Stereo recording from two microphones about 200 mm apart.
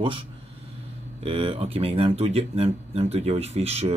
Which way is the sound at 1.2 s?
30° right (ahead or behind).